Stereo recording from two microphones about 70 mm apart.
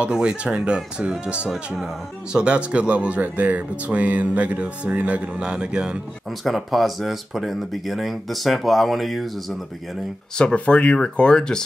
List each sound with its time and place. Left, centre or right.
0.0 s speech: centre
6.4 s speech: centre
10.3 s speech: centre